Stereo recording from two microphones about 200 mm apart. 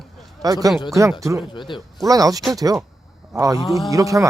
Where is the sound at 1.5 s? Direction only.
25° left (ahead or behind).